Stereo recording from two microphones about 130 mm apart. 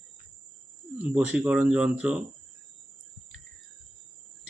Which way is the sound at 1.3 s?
5° right (ahead or behind).